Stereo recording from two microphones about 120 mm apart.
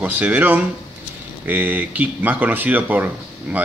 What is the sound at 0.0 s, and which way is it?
Speech, 15° right (ahead or behind).